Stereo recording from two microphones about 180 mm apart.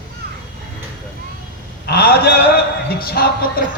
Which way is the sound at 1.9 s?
60° left (ahead or behind).